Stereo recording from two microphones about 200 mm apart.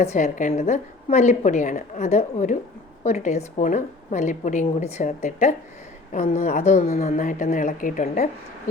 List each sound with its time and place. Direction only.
0.0 s a woman's voice: 35° left (ahead or behind)